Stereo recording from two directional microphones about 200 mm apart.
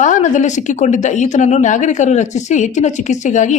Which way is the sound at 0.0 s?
40° left (ahead or behind).